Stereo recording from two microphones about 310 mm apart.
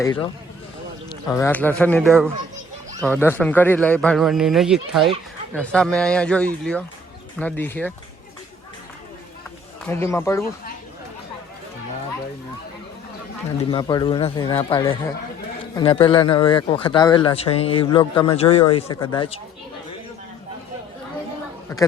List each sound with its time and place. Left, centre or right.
0.0 s a man's voice: centre
1.3 s speech: centre
9.8 s a man's voice: centre
13.6 s a man's voice: centre